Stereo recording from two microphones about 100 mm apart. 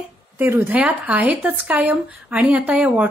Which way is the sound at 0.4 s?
25° right (ahead or behind).